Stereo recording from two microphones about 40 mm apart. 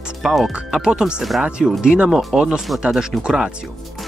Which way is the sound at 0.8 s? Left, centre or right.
Right.